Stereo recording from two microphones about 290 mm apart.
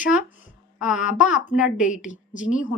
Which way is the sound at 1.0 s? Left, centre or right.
Left.